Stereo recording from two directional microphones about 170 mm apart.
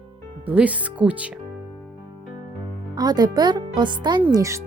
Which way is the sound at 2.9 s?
25° right (ahead or behind).